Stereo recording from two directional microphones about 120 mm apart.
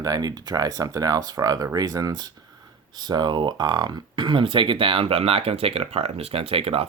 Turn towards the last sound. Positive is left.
turn(degrees=-55)  # may be behind; listen again after turning